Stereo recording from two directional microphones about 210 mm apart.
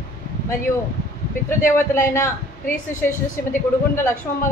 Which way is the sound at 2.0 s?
10° left (ahead or behind).